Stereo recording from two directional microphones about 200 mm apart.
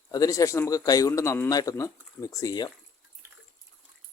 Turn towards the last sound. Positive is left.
turn(degrees=15)  # may be behind; listen again after turning